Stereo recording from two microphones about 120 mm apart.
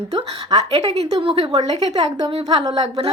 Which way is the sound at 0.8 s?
60° right (ahead or behind).